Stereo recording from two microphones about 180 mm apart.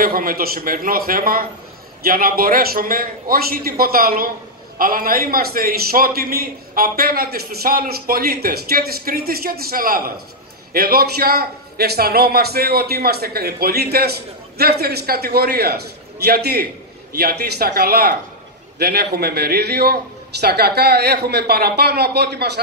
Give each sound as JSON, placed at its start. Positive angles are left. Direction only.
{"t": 0.0, "sound": "a man's voice", "side_deg": -55}